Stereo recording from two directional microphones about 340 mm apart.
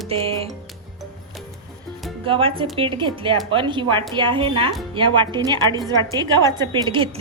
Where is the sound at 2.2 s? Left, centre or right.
Centre.